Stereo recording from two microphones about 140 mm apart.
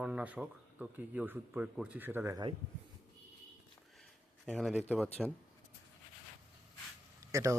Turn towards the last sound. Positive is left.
turn(degrees=-20)  # may be behind; listen again after turning